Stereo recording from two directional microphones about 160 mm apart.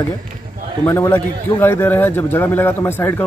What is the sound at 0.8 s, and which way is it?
Speech, 15° left (ahead or behind).